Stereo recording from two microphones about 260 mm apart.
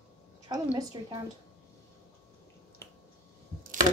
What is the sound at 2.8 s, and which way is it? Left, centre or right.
Finger snapping, centre.